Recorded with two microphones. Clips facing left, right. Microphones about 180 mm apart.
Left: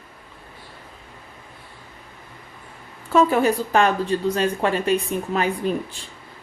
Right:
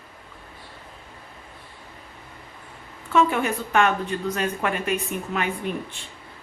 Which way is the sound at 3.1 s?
35° left (ahead or behind).